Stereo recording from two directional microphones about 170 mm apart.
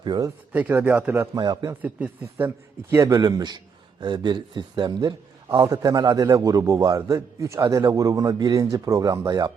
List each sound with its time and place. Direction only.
0.0 s speech: 25° right (ahead or behind)
0.5 s speech: 10° right (ahead or behind)
1.4 s a man's voice: 25° right (ahead or behind)
1.8 s speech: 10° right (ahead or behind)
2.9 s a man's voice: 20° right (ahead or behind)